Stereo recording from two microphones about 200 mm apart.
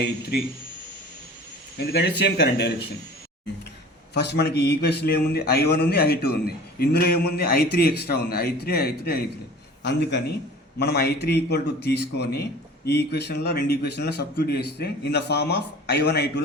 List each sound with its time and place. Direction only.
1.8 s a man's voice: 55° left (ahead or behind)
4.1 s a man's voice: 55° left (ahead or behind)